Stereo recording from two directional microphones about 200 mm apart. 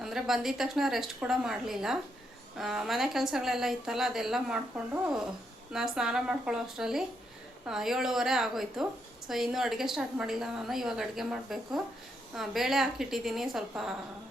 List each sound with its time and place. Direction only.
0.0 s a woman's voice: centre (ahead or behind)
5.7 s a woman's voice: 5° right (ahead or behind)